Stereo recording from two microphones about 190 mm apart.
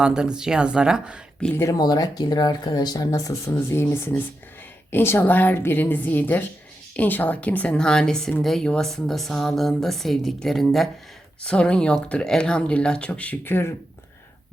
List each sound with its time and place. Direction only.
0.0 s speech: 5° right (ahead or behind)
1.5 s speech: 15° left (ahead or behind)